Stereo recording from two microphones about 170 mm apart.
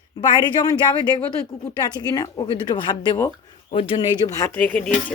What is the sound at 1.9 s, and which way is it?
Speech, 25° left (ahead or behind).